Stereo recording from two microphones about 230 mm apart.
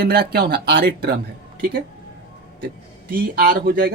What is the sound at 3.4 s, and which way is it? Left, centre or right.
Speech, right.